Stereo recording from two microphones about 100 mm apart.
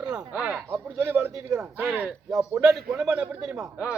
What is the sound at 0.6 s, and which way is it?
Speech, 25° right (ahead or behind).